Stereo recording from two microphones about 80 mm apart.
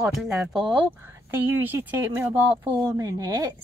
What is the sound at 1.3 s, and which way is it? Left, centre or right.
A woman's voice, right.